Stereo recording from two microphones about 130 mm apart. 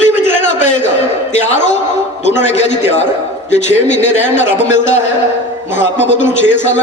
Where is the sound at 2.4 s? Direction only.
60° left (ahead or behind).